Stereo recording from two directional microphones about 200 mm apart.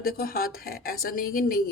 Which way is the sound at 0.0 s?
50° left (ahead or behind).